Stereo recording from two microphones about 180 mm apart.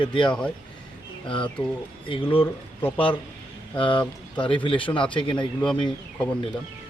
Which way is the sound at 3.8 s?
30° left (ahead or behind).